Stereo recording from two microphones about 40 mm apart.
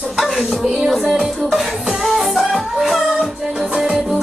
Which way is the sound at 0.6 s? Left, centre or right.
Centre.